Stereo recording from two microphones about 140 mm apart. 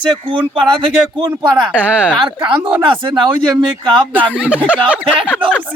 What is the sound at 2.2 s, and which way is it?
Speech, 35° right (ahead or behind).